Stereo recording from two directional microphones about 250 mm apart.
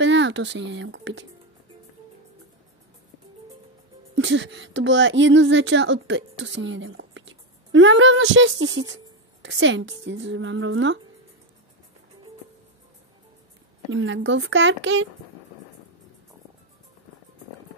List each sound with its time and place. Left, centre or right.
0.0 s speech: right
4.1 s a woman's voice: right
13.9 s speech: right